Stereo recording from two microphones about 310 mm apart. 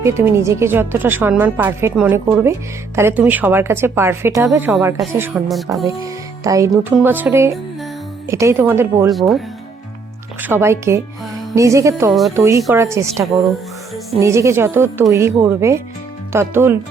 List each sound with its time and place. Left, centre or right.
0.0 s speech: centre
10.4 s speech: centre